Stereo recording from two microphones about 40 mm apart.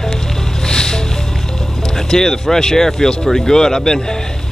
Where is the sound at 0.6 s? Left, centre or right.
Centre.